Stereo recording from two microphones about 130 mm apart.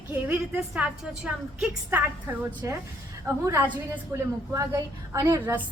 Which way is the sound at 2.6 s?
20° right (ahead or behind).